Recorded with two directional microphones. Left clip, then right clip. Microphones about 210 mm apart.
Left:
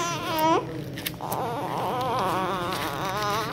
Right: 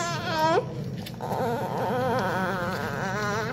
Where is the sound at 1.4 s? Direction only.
10° right (ahead or behind).